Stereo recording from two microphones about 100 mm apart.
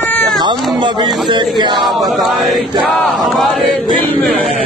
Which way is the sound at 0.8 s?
50° right (ahead or behind).